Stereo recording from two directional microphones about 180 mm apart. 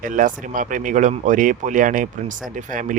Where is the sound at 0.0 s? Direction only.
50° right (ahead or behind).